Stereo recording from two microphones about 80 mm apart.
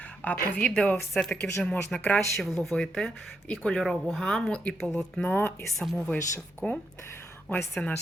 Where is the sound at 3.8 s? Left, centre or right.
Centre.